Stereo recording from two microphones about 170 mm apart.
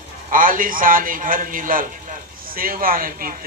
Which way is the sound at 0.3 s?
55° right (ahead or behind).